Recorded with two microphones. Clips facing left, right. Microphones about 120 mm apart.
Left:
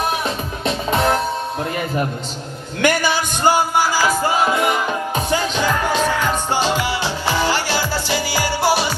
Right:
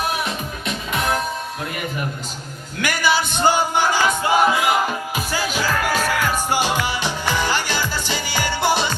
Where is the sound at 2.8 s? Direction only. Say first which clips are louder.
Left 3 dB; 50° left (ahead or behind).